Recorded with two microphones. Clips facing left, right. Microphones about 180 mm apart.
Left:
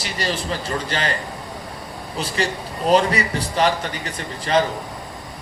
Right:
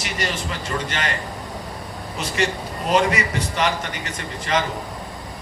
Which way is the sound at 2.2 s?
35° left (ahead or behind).